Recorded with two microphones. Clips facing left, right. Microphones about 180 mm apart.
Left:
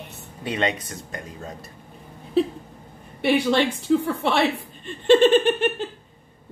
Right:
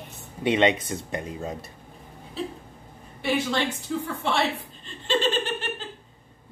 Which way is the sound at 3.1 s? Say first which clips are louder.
Left 6 dB; 65° left (ahead or behind).